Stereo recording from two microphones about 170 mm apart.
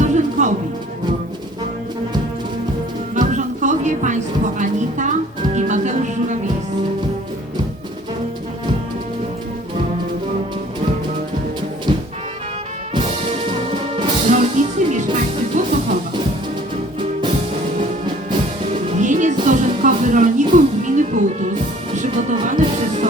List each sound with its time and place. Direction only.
0.0 s music: 45° right (ahead or behind)
3.2 s music: 45° right (ahead or behind)
14.3 s music: 45° right (ahead or behind)
18.7 s music: 45° right (ahead or behind)